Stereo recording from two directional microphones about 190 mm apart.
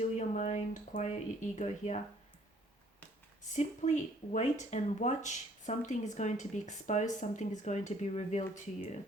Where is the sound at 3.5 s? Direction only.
35° left (ahead or behind).